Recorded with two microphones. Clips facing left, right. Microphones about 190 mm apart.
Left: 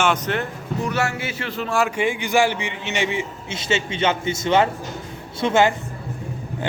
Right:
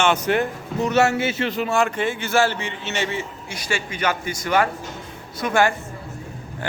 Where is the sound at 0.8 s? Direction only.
25° right (ahead or behind).